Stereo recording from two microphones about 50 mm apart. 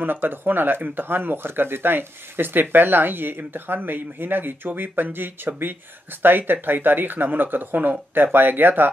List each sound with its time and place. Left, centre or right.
0.0 s speech: right